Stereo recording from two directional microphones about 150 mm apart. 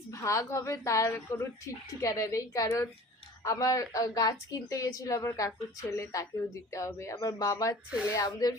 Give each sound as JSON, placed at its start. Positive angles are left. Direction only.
{"t": 0.1, "sound": "a woman's voice", "side_deg": 20}